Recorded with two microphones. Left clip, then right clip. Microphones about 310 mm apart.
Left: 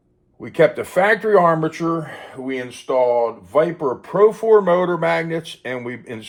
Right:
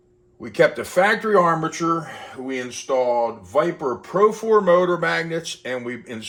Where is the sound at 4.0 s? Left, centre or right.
Centre.